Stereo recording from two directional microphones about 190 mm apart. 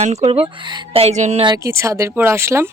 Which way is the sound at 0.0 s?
35° right (ahead or behind).